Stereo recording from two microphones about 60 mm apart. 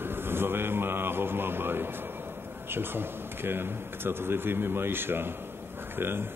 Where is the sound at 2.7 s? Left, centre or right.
Right.